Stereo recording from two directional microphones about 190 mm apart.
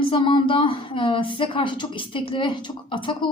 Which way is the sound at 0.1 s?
25° left (ahead or behind).